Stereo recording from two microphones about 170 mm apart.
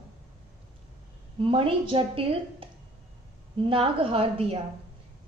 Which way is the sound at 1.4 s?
30° right (ahead or behind).